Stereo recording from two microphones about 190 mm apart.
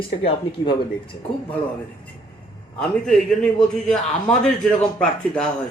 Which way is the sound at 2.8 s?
5° left (ahead or behind).